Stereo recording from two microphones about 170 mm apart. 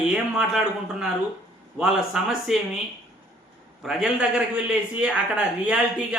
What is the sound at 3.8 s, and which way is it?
A man's voice, 5° right (ahead or behind).